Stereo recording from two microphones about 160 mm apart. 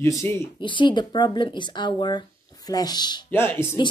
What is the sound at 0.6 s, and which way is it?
A woman's voice, 30° left (ahead or behind).